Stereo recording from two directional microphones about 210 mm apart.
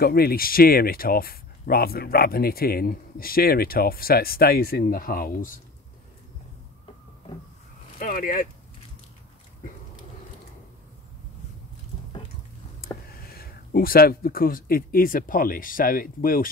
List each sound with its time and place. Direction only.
0.0 s speech: 45° left (ahead or behind)
8.0 s speech: 40° left (ahead or behind)
12.8 s speech: 45° left (ahead or behind)